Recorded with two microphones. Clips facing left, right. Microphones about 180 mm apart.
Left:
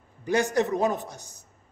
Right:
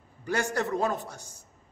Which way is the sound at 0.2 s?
20° left (ahead or behind).